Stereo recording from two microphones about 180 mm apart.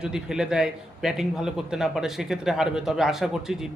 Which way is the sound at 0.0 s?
5° right (ahead or behind).